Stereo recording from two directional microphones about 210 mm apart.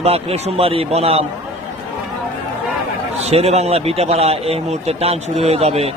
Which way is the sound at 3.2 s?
30° right (ahead or behind).